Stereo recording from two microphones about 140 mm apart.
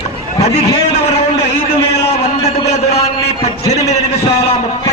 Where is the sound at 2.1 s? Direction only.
55° left (ahead or behind).